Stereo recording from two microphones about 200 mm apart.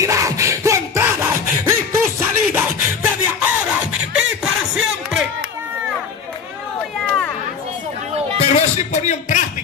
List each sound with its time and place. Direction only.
0.0 s music: 15° right (ahead or behind)
8.5 s music: 35° left (ahead or behind)